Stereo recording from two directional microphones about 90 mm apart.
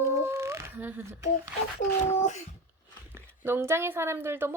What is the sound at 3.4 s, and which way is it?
A woman's voice, 25° right (ahead or behind).